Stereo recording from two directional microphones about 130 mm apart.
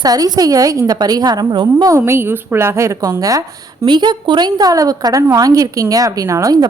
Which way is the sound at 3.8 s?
35° right (ahead or behind).